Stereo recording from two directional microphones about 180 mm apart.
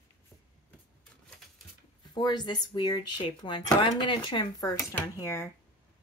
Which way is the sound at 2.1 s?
25° left (ahead or behind).